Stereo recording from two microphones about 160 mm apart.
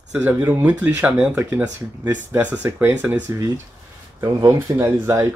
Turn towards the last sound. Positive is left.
turn(degrees=-20)  # may be behind; listen again after turning